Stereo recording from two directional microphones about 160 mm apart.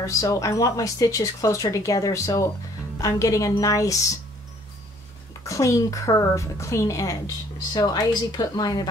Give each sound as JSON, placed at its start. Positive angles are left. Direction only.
{"t": 0.0, "sound": "a woman's voice", "side_deg": 20}
{"t": 5.4, "sound": "a woman's voice", "side_deg": 20}